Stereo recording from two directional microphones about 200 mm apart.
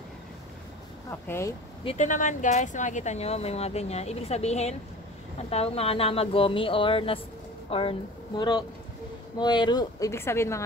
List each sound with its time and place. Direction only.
1.2 s speech: 10° left (ahead or behind)
1.9 s speech: 40° left (ahead or behind); by 10.6 s 10° left (ahead or behind)